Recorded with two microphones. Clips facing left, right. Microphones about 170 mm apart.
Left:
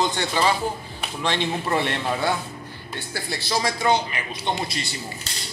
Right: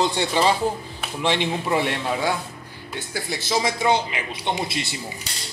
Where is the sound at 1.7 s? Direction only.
5° right (ahead or behind).